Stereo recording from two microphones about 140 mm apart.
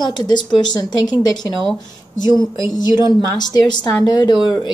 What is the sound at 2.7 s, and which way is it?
A woman's voice, 30° left (ahead or behind).